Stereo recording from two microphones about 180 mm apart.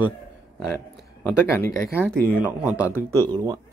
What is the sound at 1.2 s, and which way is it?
Speech, 15° left (ahead or behind).